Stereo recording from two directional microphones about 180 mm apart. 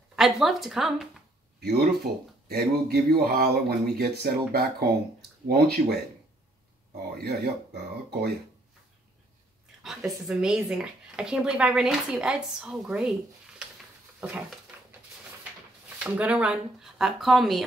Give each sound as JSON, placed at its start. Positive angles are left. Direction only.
{"t": 0.1, "sound": "speech", "side_deg": 0}
{"t": 1.6, "sound": "speech", "side_deg": -60}
{"t": 7.2, "sound": "speech", "side_deg": -60}
{"t": 9.8, "sound": "speech", "side_deg": 0}
{"t": 14.2, "sound": "speech", "side_deg": -5}
{"t": 16.0, "sound": "speech", "side_deg": -5}